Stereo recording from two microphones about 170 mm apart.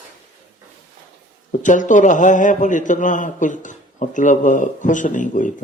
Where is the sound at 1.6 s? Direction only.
50° left (ahead or behind).